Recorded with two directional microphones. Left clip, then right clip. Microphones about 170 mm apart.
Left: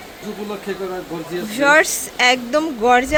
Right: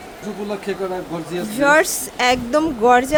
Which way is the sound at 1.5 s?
10° right (ahead or behind).